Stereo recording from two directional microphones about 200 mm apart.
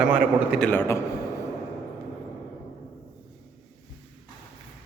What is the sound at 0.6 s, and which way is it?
Speech, 10° left (ahead or behind).